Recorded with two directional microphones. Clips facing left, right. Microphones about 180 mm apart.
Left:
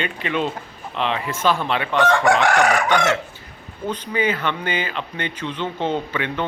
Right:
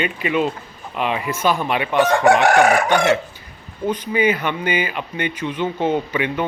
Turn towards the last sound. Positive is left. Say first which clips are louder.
# right 3 dB
turn(degrees=-10)  # may be behind; listen again after turning